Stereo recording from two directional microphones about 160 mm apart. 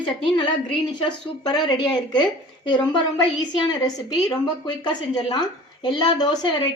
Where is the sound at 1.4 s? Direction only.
25° left (ahead or behind).